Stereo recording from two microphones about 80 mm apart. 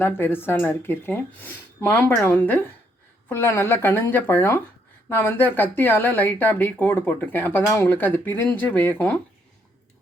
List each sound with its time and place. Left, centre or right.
0.0 s speech: left